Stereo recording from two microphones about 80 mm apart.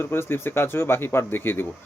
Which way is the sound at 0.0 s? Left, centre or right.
Left.